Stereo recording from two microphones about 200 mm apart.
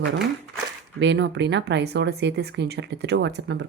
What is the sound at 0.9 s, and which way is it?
Speech, 60° right (ahead or behind).